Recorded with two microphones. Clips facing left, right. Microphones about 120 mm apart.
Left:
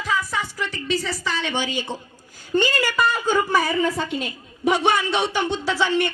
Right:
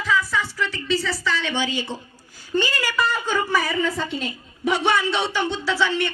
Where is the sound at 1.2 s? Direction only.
50° left (ahead or behind).